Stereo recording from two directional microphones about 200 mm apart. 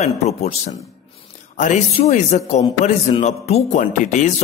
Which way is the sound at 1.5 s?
35° left (ahead or behind).